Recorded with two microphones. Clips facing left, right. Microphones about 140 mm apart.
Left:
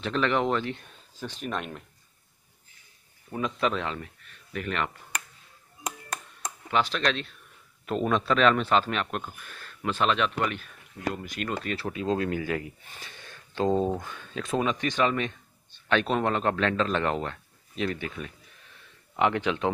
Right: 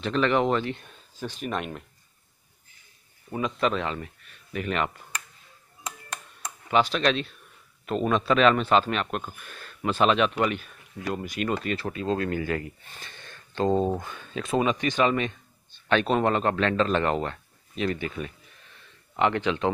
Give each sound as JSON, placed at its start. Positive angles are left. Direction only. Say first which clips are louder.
{"t": 0.0, "sound": "a man's voice", "louder": "right 3 dB", "side_deg": 0}
{"t": 3.3, "sound": "a man's voice", "louder": "right 2 dB", "side_deg": -5}
{"t": 4.5, "sound": "speech", "louder": "right 3 dB", "side_deg": -15}
{"t": 6.7, "sound": "speech", "louder": "right 4 dB", "side_deg": -15}
{"t": 7.8, "sound": "a man's voice", "louder": "right 1 dB", "side_deg": 0}
{"t": 11.7, "sound": "speech", "louder": "right 1 dB", "side_deg": 10}
{"t": 13.8, "sound": "a man's voice", "louder": "right 1 dB", "side_deg": -5}